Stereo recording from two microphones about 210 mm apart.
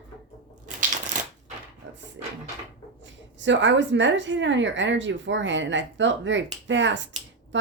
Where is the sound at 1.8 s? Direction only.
60° right (ahead or behind).